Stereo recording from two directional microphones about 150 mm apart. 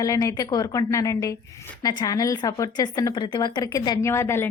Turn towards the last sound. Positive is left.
turn(degrees=15)  # may be behind; listen again after turning